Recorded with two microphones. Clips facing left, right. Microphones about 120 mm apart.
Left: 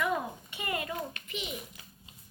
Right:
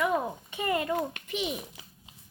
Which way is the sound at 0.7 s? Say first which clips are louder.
Right 6 dB; 35° right (ahead or behind).